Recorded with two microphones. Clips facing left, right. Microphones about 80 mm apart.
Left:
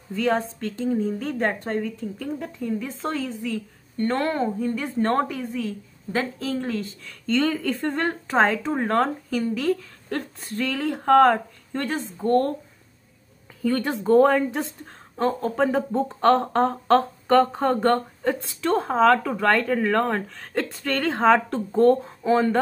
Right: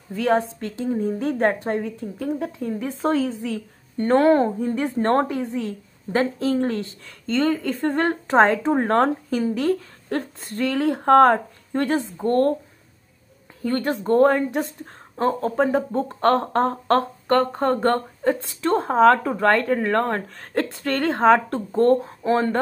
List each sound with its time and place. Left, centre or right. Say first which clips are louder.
0.1 s a woman's voice: right 3 dB; centre; by 5.6 s right
6.6 s speech: right 4 dB; right
7.2 s a woman's voice: right 1 dB; centre
12.3 s speech: right 2 dB; right
13.7 s speech: even; centre
18.9 s a woman's voice: right 3 dB; centre